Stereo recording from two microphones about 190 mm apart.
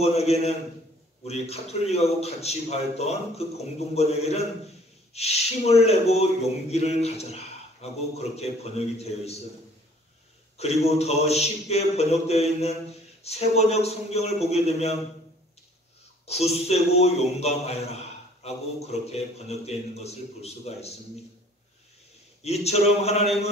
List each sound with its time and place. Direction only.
0.0 s a man's voice: 35° left (ahead or behind)
10.6 s a man's voice: 35° left (ahead or behind)
16.3 s a man's voice: 35° left (ahead or behind)
22.4 s a man's voice: 35° left (ahead or behind)